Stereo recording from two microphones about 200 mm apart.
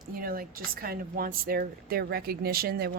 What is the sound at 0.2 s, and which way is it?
Speech, 45° right (ahead or behind).